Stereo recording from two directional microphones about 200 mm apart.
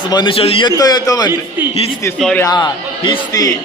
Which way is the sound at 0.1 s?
25° left (ahead or behind).